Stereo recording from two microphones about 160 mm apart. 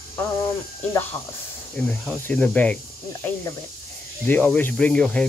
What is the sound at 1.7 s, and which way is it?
Speech, 5° left (ahead or behind).